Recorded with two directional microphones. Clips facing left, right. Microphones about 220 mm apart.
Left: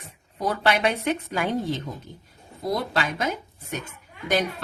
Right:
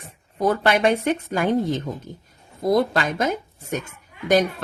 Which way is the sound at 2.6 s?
50° right (ahead or behind).